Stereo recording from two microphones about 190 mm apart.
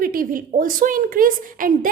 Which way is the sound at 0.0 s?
50° right (ahead or behind).